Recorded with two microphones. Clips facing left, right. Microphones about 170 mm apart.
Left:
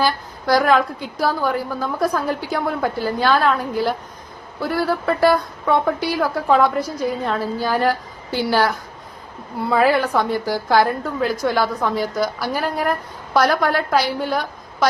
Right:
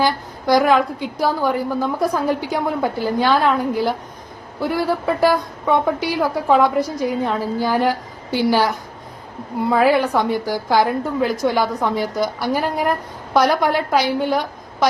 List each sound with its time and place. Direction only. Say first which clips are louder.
0.0 s a sound: right 1 dB; 15° right (ahead or behind)
1.2 s a woman's voice: right 1 dB; 15° right (ahead or behind)
9.8 s a woman's voice: right 1 dB; 15° right (ahead or behind)